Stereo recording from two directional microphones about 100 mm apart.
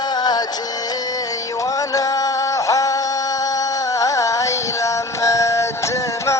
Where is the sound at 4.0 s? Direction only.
35° left (ahead or behind).